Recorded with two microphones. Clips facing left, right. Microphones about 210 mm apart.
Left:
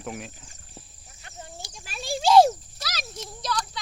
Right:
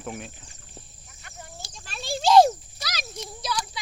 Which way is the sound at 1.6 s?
10° left (ahead or behind).